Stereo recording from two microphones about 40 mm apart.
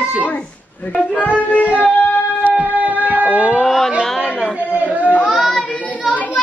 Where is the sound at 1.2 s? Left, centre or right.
Left.